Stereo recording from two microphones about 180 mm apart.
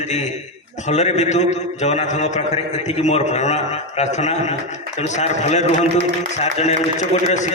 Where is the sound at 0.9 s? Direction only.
40° left (ahead or behind).